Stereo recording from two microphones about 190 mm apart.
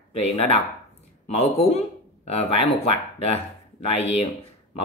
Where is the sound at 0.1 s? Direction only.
35° left (ahead or behind).